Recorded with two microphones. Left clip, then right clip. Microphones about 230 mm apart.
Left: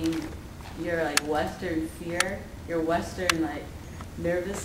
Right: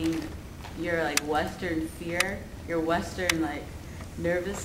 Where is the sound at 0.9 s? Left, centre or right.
Centre.